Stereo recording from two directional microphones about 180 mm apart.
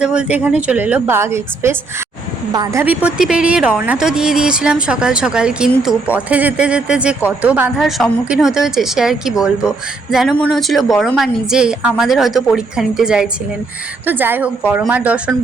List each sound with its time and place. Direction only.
0.0 s a woman's voice: 5° right (ahead or behind); by 2.8 s 20° right (ahead or behind)
2.8 s a woman's voice: 10° right (ahead or behind)